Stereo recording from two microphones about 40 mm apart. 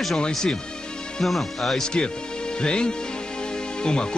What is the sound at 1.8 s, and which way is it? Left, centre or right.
Speech, centre.